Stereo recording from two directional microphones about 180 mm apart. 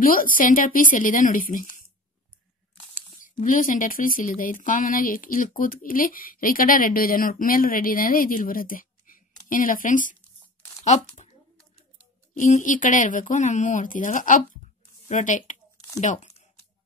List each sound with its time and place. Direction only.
0.0 s speech: 50° left (ahead or behind)
2.9 s speech: 45° left (ahead or behind)
12.4 s speech: 45° left (ahead or behind)